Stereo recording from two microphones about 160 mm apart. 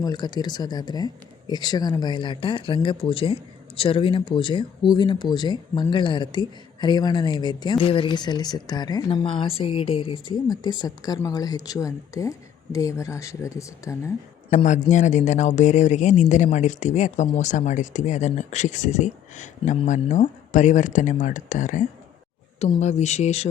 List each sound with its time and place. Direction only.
0.0 s speech: 25° left (ahead or behind)
14.5 s speech: 50° left (ahead or behind)